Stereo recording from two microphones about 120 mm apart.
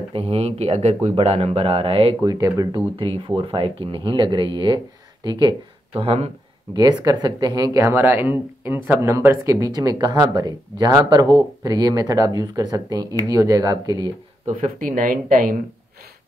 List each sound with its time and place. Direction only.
0.1 s speech: 55° right (ahead or behind)
2.2 s speech: 30° right (ahead or behind)
3.0 s speech: 45° right (ahead or behind)
5.9 s speech: 55° right (ahead or behind)
6.7 s speech: 35° right (ahead or behind)